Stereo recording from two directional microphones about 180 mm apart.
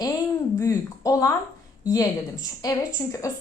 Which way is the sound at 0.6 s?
15° left (ahead or behind).